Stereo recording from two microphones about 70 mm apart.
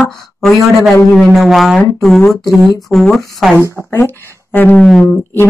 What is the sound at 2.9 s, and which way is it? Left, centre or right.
Speech, centre.